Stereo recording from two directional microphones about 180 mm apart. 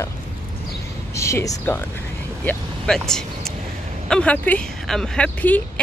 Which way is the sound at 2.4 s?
5° left (ahead or behind).